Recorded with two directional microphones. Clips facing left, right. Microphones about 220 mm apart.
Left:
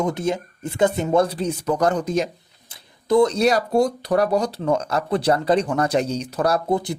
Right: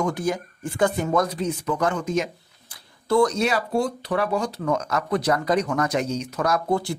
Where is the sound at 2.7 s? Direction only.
20° left (ahead or behind).